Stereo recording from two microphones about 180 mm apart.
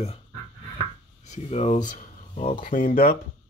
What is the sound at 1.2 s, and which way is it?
Speech, 40° left (ahead or behind).